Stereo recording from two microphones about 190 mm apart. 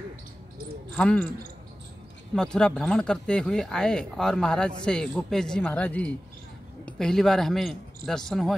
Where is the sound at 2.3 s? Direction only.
5° left (ahead or behind).